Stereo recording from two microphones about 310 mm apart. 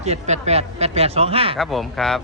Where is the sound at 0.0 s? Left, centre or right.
Right.